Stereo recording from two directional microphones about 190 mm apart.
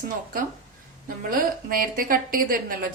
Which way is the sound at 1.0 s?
45° right (ahead or behind).